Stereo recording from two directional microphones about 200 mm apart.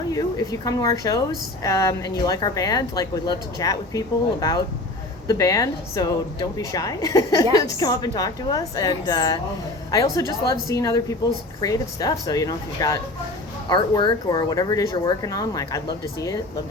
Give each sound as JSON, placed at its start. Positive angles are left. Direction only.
{"t": 0.1, "sound": "speech", "side_deg": 20}